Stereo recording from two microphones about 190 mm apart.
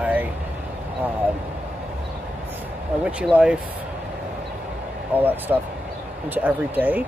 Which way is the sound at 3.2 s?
5° right (ahead or behind).